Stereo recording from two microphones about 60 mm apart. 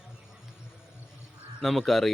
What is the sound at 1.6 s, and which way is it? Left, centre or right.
Speech, centre.